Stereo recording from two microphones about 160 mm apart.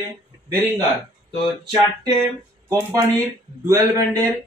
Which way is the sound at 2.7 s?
15° right (ahead or behind).